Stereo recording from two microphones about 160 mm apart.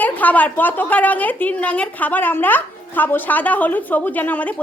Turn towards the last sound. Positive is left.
turn(degrees=10)  # may be behind; listen again after turning